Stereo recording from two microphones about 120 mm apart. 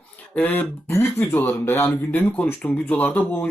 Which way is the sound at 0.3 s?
15° left (ahead or behind).